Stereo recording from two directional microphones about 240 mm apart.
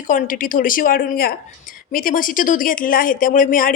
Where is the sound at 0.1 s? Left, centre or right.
Left.